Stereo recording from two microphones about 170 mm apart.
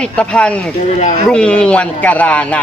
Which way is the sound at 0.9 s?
45° left (ahead or behind).